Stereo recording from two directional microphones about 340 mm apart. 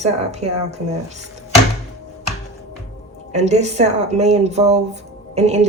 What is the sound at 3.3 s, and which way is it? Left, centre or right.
A woman's voice, centre.